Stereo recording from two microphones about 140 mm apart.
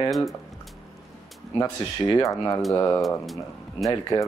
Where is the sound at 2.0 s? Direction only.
25° left (ahead or behind).